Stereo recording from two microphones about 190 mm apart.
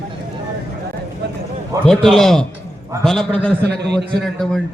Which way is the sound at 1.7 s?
15° right (ahead or behind).